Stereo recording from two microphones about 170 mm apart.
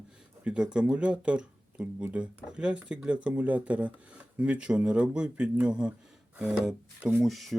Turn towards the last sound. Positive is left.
turn(degrees=0)  # may be behind; listen again after turning